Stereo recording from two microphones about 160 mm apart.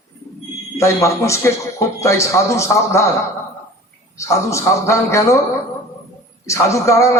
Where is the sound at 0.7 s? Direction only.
20° left (ahead or behind).